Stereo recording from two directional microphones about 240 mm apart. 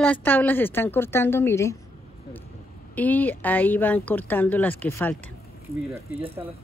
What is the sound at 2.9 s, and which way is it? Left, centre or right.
A woman's voice, centre.